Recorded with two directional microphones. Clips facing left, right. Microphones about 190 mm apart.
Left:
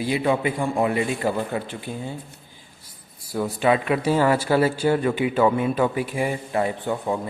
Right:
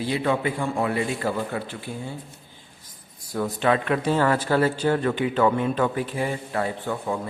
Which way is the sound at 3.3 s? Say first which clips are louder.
Left 2 dB; 10° left (ahead or behind).